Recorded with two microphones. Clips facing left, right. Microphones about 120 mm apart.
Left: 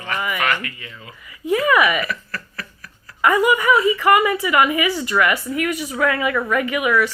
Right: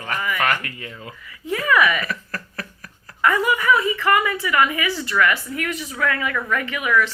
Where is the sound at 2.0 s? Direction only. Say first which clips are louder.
Left 1 dB; 45° right (ahead or behind).